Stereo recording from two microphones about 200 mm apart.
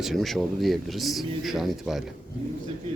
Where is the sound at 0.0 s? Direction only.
Centre (ahead or behind).